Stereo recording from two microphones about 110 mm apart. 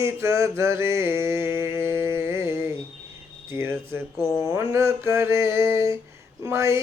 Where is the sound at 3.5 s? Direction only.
25° right (ahead or behind).